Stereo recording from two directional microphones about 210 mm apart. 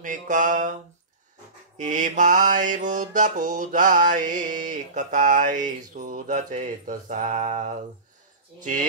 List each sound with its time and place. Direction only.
0.0 s mantra: 40° right (ahead or behind)
1.8 s mantra: 35° right (ahead or behind)